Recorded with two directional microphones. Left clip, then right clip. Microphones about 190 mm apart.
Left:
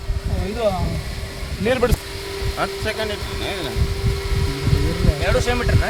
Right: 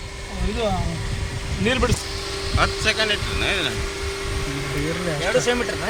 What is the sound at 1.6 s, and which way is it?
Speech, 50° left (ahead or behind).